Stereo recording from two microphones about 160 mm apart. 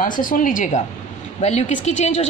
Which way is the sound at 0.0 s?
60° left (ahead or behind).